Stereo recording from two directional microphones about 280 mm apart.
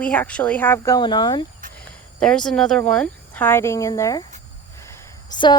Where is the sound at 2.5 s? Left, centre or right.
Centre.